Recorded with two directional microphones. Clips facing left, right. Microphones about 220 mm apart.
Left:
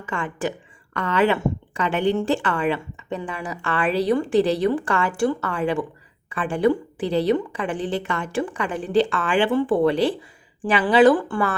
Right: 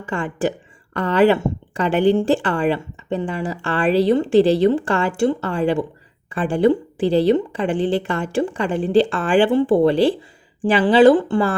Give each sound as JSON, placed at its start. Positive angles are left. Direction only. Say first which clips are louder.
{"t": 0.0, "sound": "speech", "louder": "right 5 dB", "side_deg": -30}